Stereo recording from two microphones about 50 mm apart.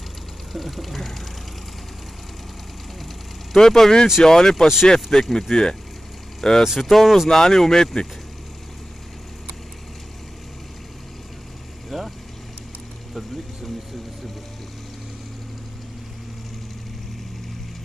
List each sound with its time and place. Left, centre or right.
0.5 s speech: centre
3.5 s speech: centre
5.2 s speech: centre
5.5 s speech: centre
6.6 s speech: centre
11.9 s vehicle: centre